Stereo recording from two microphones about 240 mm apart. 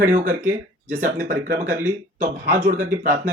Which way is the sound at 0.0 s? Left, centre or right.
Right.